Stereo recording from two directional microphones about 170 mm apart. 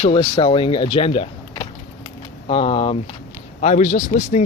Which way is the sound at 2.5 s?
35° left (ahead or behind).